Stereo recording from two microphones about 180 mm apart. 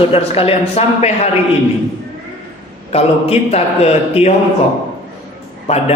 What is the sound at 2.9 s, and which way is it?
A man's voice, 35° left (ahead or behind).